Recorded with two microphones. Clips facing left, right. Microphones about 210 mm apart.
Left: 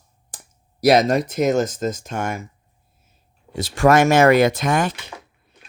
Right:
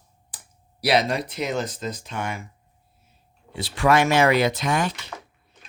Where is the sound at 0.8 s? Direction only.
45° left (ahead or behind).